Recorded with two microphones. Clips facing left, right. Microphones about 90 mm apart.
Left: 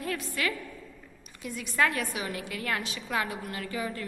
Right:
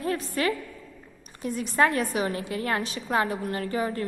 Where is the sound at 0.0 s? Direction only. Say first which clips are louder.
Right 5 dB; 35° right (ahead or behind).